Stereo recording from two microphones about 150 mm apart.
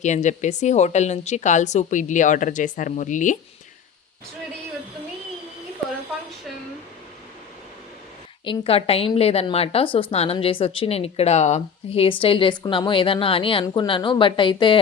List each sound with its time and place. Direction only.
0.0 s a woman's voice: 50° left (ahead or behind)
8.4 s a woman's voice: 40° left (ahead or behind)